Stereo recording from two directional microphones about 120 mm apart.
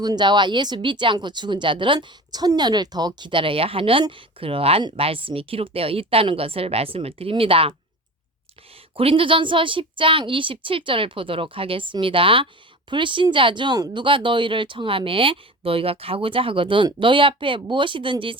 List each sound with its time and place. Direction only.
0.0 s speech: 35° right (ahead or behind)
9.0 s speech: 50° right (ahead or behind)